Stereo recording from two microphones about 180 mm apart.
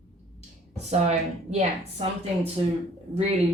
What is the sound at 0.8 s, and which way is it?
Speech, 40° right (ahead or behind).